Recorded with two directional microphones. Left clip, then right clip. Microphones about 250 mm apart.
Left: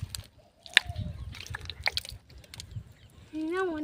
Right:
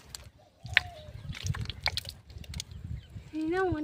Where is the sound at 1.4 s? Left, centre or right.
Centre.